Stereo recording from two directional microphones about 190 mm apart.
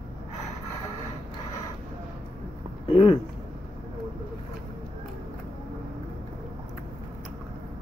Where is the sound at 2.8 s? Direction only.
30° left (ahead or behind).